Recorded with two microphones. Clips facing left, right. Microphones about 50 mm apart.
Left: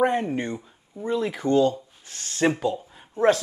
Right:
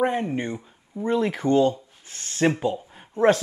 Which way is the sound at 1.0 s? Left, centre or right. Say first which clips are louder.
Right 2 dB; right.